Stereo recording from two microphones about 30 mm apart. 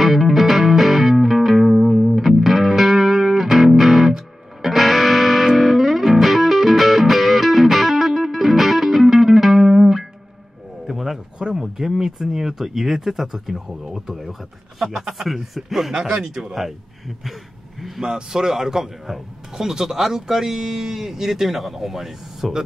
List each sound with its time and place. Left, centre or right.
0.0 s music: centre
10.9 s a sound: centre
11.4 s a sound: right
12.0 s speech: centre
15.9 s speech: centre
17.2 s speech: centre
18.0 s speech: right